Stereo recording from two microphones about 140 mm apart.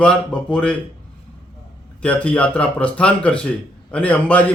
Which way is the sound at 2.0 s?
10° left (ahead or behind).